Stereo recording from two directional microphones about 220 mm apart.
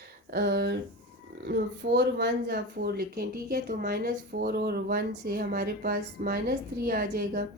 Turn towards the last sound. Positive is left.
turn(degrees=-45)  # may be behind; listen again after turning